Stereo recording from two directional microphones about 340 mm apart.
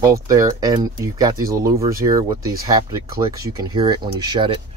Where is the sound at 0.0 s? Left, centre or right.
Centre.